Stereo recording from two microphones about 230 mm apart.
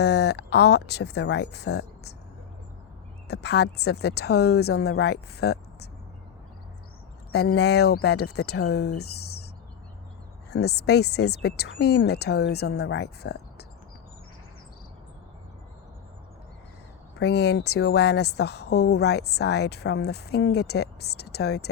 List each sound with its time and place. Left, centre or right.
0.0 s a woman's voice: left
3.2 s a woman's voice: left
7.3 s a woman's voice: left
10.5 s a woman's voice: left
17.2 s a woman's voice: left